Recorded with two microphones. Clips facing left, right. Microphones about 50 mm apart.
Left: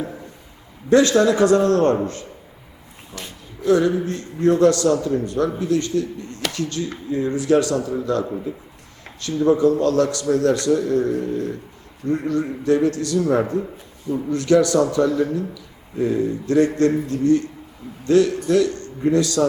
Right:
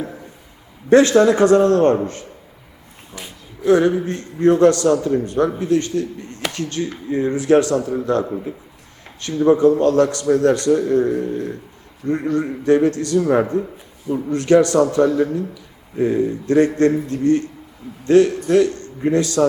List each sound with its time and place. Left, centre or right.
0.0 s a sound: centre
0.9 s a man's voice: right
3.6 s a man's voice: right
8.2 s speech: centre
9.2 s a man's voice: right